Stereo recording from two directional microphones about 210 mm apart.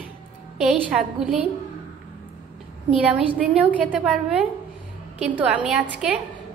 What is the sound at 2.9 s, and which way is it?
A woman's voice, 5° right (ahead or behind).